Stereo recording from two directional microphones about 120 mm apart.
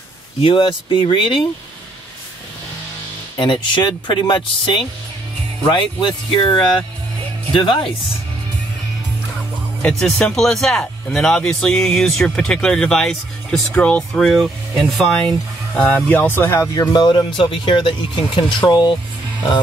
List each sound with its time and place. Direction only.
0.4 s speech: 45° left (ahead or behind)
3.3 s speech: 45° left (ahead or behind)
5.6 s speech: 40° left (ahead or behind)
9.8 s speech: 5° left (ahead or behind); by 16.8 s 25° left (ahead or behind)
16.9 s speech: 40° left (ahead or behind)